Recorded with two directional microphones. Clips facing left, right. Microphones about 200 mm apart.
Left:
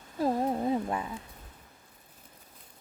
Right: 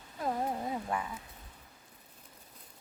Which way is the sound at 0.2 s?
30° left (ahead or behind).